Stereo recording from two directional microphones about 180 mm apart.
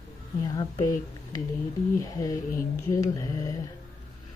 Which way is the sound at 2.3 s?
45° left (ahead or behind).